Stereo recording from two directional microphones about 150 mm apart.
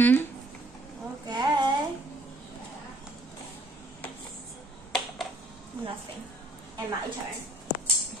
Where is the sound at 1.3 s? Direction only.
30° right (ahead or behind).